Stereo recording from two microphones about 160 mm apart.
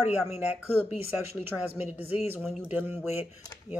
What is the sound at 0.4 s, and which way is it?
Speech, 45° left (ahead or behind).